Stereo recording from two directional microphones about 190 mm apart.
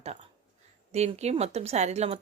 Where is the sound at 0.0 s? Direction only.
35° right (ahead or behind).